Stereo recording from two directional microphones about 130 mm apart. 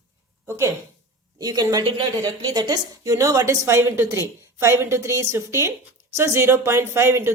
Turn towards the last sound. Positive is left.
turn(degrees=-20)  # may be behind; listen again after turning